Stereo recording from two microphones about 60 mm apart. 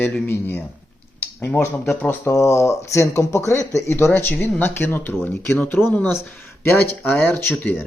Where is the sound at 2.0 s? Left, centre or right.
Left.